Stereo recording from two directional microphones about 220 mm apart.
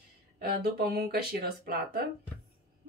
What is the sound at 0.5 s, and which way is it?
Speech, 45° right (ahead or behind).